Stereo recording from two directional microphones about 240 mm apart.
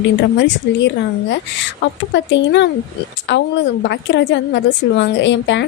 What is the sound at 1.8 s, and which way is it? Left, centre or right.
A woman's voice, left.